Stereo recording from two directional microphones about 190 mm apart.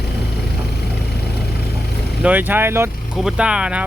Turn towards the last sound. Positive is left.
turn(degrees=-5)  # may be behind; listen again after turning